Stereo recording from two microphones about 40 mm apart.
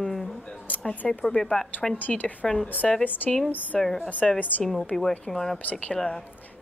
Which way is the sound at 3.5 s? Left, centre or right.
Left.